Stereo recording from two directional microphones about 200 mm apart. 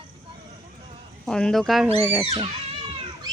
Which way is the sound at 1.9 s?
10° right (ahead or behind).